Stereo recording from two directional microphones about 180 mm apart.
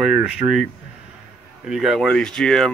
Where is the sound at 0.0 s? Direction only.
5° right (ahead or behind).